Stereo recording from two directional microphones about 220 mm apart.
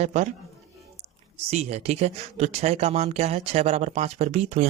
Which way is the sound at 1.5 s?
30° right (ahead or behind).